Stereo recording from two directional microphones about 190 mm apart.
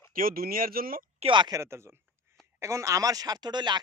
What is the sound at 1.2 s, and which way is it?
Speech, 25° right (ahead or behind).